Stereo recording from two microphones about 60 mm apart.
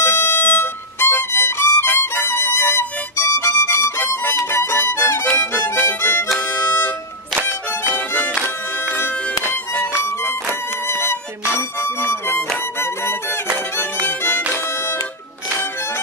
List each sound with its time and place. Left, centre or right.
0.0 s music: left
7.9 s music: left
8.9 s music: left
10.9 s music: left
13.7 s music: left